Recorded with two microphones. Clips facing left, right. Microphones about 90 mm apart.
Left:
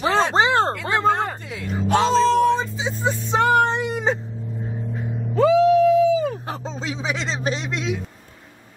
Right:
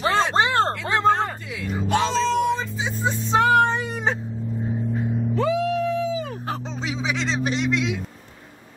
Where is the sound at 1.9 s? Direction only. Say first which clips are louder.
Left 4 dB; 40° left (ahead or behind).